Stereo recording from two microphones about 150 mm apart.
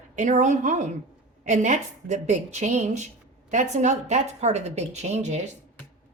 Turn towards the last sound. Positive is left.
turn(degrees=-50)  # may be behind; listen again after turning